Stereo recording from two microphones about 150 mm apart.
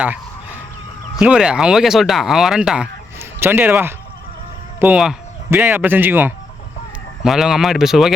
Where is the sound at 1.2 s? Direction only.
5° right (ahead or behind).